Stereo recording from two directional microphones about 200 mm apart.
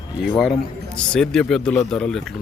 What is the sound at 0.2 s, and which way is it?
Speech, centre (ahead or behind).